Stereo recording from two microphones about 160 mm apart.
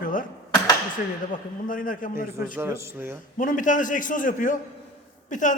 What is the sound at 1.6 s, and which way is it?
Speech, 55° left (ahead or behind).